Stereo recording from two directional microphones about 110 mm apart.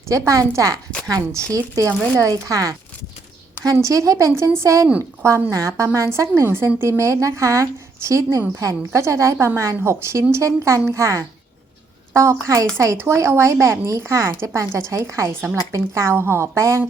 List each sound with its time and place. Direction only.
0.1 s a woman's voice: 30° right (ahead or behind)